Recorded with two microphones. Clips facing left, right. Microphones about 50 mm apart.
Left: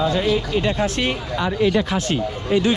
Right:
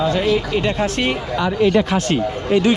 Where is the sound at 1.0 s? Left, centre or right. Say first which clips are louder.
Right 3 dB; right.